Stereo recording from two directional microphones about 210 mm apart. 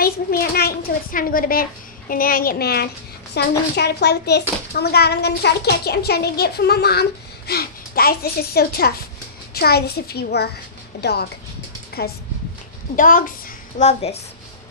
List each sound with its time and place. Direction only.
0.0 s a woman's voice: 45° left (ahead or behind)